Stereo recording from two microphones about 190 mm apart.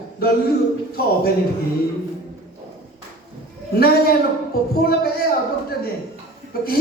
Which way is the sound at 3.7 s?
55° left (ahead or behind).